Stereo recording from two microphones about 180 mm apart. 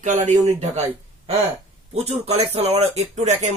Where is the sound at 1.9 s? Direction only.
35° right (ahead or behind).